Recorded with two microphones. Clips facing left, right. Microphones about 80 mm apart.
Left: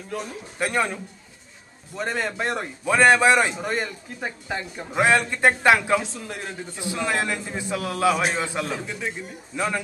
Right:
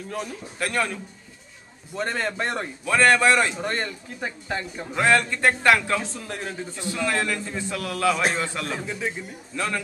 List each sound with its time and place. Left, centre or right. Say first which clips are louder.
0.6 s a man's voice: left 2 dB; centre
2.0 s speech: even; centre
2.8 s a man's voice: left 2 dB; centre
3.5 s speech: left 1 dB; centre
4.9 s a man's voice: left 1 dB; centre
6.0 s speech: right 1 dB; centre
6.7 s a man's voice: left 1 dB; centre
8.8 s speech: right 1 dB; centre
9.5 s a man's voice: left 2 dB; centre